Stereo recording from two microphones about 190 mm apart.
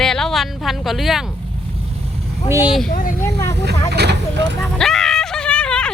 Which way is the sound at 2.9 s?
45° left (ahead or behind).